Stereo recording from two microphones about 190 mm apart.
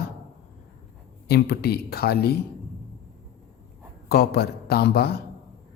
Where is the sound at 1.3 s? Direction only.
55° left (ahead or behind).